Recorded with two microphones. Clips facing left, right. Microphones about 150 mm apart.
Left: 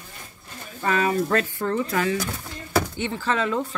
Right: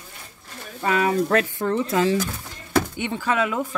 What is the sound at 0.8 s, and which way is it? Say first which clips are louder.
A woman's voice: right 1 dB; 15° right (ahead or behind).